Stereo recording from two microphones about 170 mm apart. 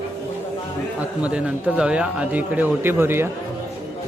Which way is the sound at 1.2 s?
5° right (ahead or behind).